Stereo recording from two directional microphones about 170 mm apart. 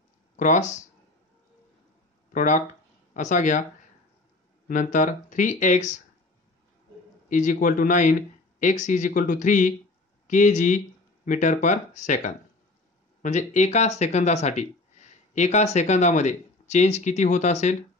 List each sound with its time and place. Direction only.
0.4 s speech: 45° left (ahead or behind)
2.3 s speech: 45° left (ahead or behind)
4.6 s speech: 50° left (ahead or behind)
7.2 s speech: 50° left (ahead or behind)